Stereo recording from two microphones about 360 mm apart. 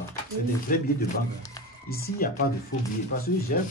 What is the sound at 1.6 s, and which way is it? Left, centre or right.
Music, centre.